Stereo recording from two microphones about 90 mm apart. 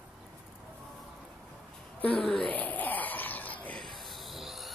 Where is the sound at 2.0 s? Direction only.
15° left (ahead or behind).